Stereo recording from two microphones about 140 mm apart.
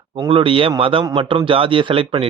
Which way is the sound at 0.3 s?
40° right (ahead or behind).